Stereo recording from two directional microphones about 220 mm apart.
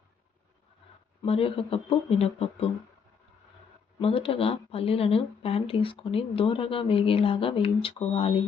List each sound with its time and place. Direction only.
1.2 s speech: 25° left (ahead or behind)
4.0 s speech: 25° left (ahead or behind)